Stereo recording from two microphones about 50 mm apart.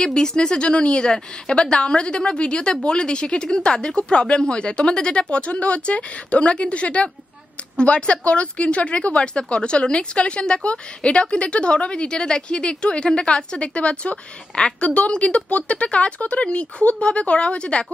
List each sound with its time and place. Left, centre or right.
0.0 s a woman's voice: centre